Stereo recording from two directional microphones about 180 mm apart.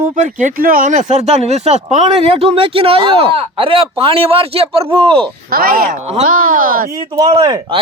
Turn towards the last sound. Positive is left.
turn(degrees=-20)  # may be behind; listen again after turning